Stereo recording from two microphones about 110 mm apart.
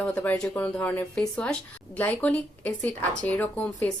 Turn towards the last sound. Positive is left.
turn(degrees=15)  # may be behind; listen again after turning